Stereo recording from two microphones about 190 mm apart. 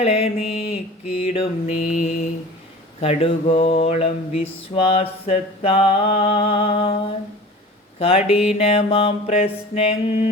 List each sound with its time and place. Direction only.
0.0 s mantra: 30° left (ahead or behind)
3.0 s mantra: 30° left (ahead or behind)